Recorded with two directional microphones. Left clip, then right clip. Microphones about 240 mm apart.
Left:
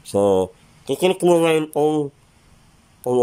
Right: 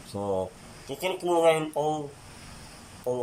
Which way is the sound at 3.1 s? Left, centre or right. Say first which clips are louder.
Left 10 dB; left.